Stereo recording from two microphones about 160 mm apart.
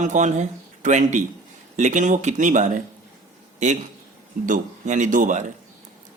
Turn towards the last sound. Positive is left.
turn(degrees=-55)  # may be behind; listen again after turning